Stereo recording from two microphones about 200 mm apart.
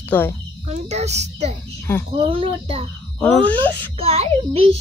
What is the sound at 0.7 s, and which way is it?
A child's voice, 35° right (ahead or behind).